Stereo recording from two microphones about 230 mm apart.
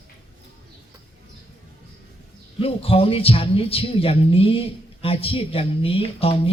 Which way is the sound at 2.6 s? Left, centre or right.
Left.